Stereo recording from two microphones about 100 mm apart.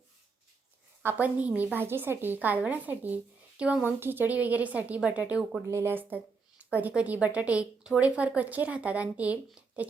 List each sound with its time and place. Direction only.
1.0 s speech: 15° right (ahead or behind)
5.7 s speech: 20° right (ahead or behind)